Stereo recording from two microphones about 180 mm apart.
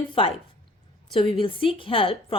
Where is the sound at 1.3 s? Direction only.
30° left (ahead or behind).